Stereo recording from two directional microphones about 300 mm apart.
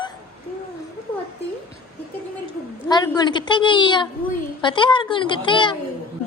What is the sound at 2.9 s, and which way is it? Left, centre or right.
A woman's voice, centre.